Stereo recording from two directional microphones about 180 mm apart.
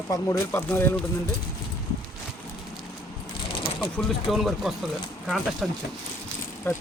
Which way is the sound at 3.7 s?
Centre (ahead or behind).